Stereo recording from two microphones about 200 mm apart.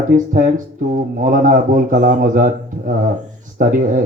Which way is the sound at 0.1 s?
40° right (ahead or behind).